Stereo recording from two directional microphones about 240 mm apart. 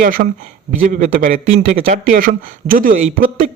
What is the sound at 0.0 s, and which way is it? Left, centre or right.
A man's voice, right.